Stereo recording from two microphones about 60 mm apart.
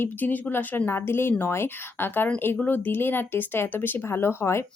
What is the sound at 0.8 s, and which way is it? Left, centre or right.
Speech, left.